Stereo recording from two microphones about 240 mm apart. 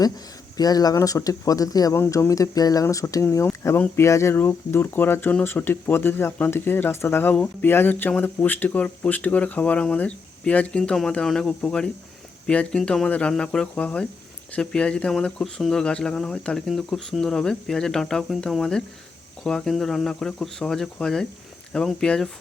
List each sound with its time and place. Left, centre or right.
0.5 s speech: centre